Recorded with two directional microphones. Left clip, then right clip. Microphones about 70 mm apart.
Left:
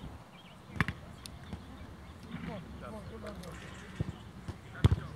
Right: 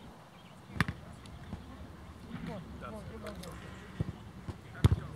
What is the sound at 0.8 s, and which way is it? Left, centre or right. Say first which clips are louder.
Basketball bounce: even; right.